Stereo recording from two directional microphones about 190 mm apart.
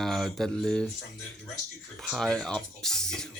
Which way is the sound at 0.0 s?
Centre (ahead or behind).